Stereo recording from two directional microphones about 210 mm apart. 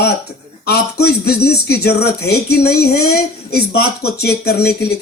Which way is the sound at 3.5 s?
90° left.